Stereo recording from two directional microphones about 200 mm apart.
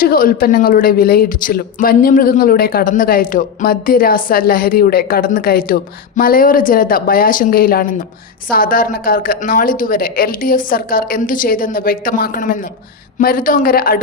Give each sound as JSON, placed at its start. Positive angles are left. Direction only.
{"t": 0.0, "sound": "a woman's voice", "side_deg": 45}